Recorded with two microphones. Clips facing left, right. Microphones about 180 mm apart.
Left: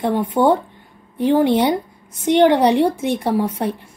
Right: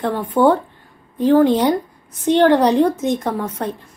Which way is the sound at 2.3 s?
15° left (ahead or behind).